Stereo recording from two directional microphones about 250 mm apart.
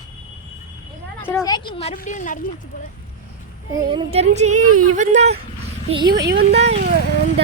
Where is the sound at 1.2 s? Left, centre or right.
Centre; by 2.4 s left.